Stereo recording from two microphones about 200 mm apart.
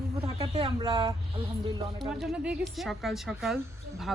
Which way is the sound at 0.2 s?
15° right (ahead or behind).